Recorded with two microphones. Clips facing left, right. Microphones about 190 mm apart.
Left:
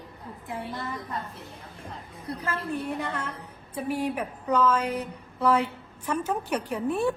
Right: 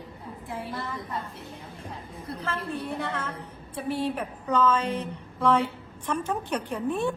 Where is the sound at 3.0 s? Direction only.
15° left (ahead or behind).